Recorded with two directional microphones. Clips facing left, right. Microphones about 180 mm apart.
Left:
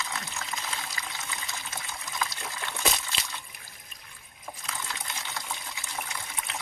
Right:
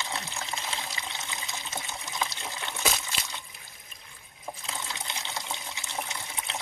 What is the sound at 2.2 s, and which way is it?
Trickle, 25° right (ahead or behind).